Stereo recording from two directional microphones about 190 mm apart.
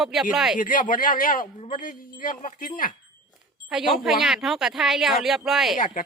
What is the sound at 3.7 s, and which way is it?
Speech, 5° right (ahead or behind).